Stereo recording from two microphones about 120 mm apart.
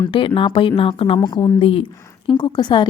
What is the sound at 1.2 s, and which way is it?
A woman's voice, 40° left (ahead or behind).